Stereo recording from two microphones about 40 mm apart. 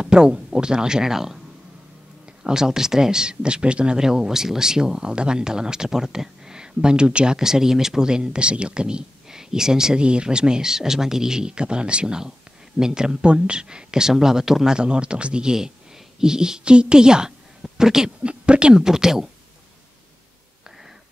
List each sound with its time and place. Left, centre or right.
0.0 s speech: right
2.4 s speech: centre
4.0 s speech: centre
7.3 s speech: centre
14.8 s speech: right
18.2 s speech: right
18.8 s speech: centre